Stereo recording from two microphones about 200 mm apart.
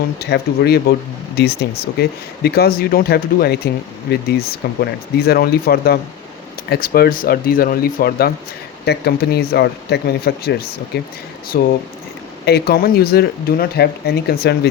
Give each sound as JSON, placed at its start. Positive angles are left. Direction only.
{"t": 0.2, "sound": "speech", "side_deg": 55}